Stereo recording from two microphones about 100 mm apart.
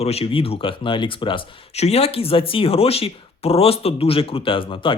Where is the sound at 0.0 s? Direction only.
90° left.